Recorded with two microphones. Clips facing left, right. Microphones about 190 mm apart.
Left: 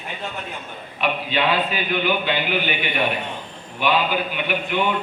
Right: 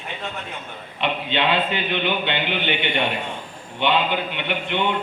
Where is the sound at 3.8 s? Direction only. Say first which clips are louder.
Even; 25° right (ahead or behind).